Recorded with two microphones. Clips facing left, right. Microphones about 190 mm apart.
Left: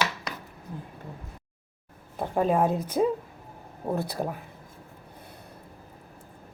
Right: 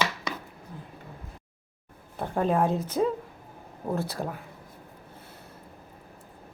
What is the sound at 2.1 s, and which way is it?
A woman's voice, 10° left (ahead or behind).